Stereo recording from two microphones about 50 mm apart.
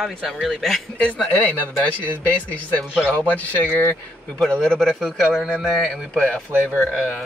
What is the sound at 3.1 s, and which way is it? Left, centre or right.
Speech, left.